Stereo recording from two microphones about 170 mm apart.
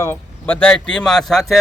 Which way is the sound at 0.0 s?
10° left (ahead or behind).